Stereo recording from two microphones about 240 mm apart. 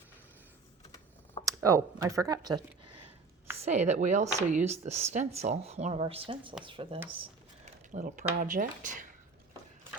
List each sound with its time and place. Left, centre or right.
1.5 s speech: centre
3.6 s speech: right
7.2 s a sound: right
8.4 s speech: right